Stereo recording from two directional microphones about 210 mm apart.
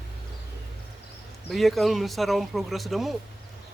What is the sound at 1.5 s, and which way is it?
Speech, centre (ahead or behind).